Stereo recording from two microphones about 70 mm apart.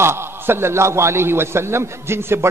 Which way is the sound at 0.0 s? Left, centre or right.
Right.